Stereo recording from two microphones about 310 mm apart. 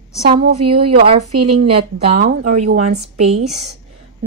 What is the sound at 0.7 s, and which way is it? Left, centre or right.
A woman's voice, centre.